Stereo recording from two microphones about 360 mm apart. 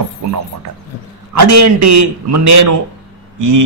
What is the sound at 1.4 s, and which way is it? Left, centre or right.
A man's voice, right.